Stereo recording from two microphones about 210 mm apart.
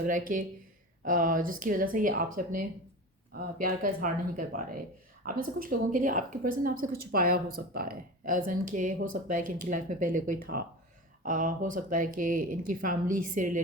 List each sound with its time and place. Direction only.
0.0 s a woman's voice: 40° right (ahead or behind)